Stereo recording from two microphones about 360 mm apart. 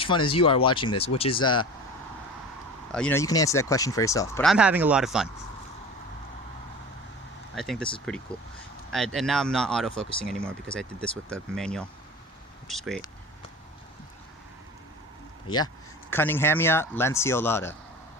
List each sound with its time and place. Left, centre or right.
0.0 s speech: centre
2.9 s speech: centre
7.5 s speech: centre
15.4 s speech: centre